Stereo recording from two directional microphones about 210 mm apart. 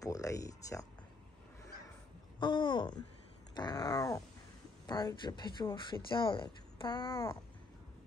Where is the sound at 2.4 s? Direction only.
20° left (ahead or behind).